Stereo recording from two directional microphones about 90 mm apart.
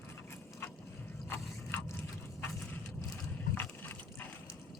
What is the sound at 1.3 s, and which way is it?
Scrape, 25° left (ahead or behind).